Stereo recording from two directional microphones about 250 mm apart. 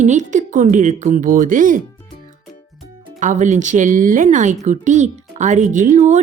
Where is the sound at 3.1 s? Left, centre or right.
Right.